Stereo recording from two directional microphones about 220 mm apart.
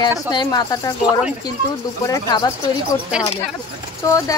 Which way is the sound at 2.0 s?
15° left (ahead or behind).